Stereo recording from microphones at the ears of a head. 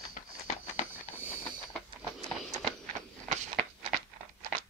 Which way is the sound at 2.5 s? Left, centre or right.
Right.